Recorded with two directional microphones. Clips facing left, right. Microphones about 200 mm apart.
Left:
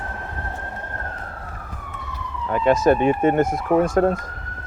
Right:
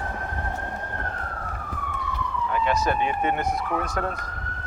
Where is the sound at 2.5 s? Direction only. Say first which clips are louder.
Left 8 dB; 45° left (ahead or behind).